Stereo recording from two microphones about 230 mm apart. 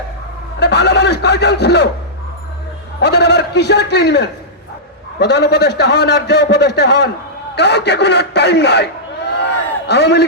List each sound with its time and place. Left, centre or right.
0.6 s speech: left
3.0 s a man's voice: left